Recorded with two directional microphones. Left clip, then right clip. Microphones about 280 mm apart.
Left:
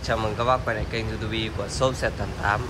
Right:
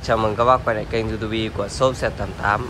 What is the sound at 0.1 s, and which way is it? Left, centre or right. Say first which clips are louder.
Speech: right 7 dB; centre.